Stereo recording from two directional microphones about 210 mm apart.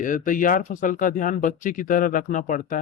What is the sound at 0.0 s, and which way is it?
Speech, 40° left (ahead or behind).